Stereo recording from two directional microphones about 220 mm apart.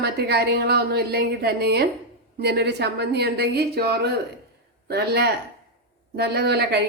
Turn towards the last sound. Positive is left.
turn(degrees=-45)  # may be behind; listen again after turning